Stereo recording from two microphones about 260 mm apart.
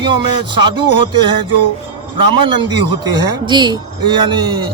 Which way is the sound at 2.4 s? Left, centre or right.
Centre.